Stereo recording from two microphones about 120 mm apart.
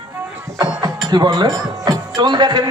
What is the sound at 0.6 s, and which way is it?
A man's voice, 35° right (ahead or behind).